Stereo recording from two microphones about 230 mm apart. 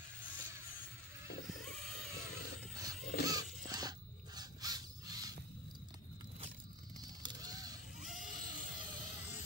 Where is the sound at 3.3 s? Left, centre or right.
Centre.